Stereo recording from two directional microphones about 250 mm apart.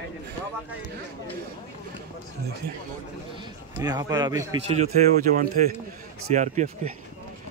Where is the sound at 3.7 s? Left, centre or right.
Centre.